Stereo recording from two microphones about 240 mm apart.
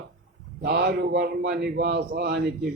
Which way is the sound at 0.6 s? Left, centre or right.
Right.